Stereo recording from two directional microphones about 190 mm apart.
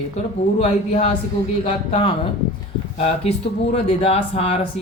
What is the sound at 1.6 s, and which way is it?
Speech, 25° left (ahead or behind).